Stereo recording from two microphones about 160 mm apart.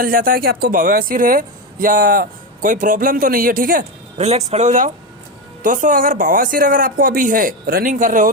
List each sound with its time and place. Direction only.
0.0 s speech: 65° right (ahead or behind)
4.2 s speech: 40° right (ahead or behind)